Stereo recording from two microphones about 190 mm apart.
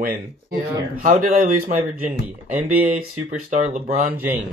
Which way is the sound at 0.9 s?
45° right (ahead or behind).